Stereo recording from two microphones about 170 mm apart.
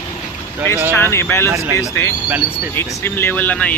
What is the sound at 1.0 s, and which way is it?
Speech, 15° left (ahead or behind).